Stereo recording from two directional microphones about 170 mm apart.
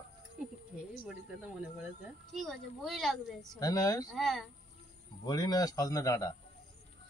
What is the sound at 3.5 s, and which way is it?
Speech, 20° left (ahead or behind).